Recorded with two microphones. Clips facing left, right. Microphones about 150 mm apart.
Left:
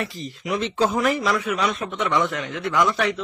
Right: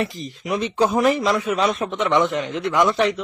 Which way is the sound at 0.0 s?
20° right (ahead or behind).